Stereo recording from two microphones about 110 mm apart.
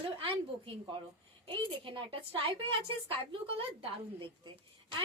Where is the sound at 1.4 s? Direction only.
50° right (ahead or behind).